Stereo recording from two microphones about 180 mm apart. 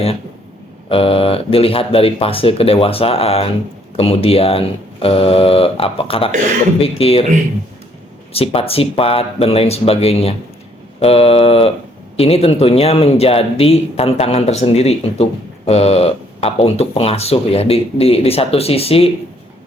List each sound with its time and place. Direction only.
0.9 s speech: 30° left (ahead or behind)
8.3 s speech: 30° left (ahead or behind)